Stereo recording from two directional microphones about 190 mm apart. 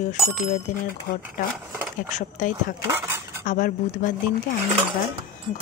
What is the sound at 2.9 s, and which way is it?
Dishes, 15° right (ahead or behind).